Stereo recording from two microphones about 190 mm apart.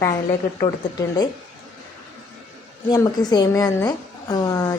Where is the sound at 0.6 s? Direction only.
20° left (ahead or behind).